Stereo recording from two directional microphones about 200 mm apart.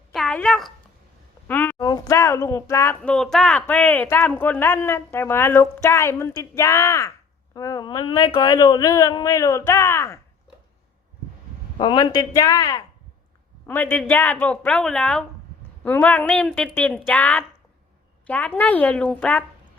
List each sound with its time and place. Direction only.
0.1 s a sound: 5° left (ahead or behind)
1.5 s speech: 10° left (ahead or behind)
11.8 s a man's voice: 20° left (ahead or behind); by 19.5 s 5° left (ahead or behind)